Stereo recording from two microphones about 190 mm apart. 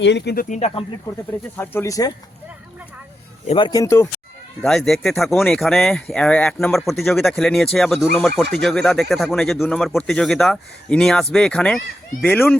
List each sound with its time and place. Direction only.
0.0 s speech: 65° left (ahead or behind)
0.4 s speech: 40° left (ahead or behind)
1.1 s speech: 20° left (ahead or behind)
1.5 s speech: 10° left (ahead or behind)
3.4 s speech: 30° left (ahead or behind)
3.7 s speech: 15° left (ahead or behind)
4.6 s speech: centre (ahead or behind)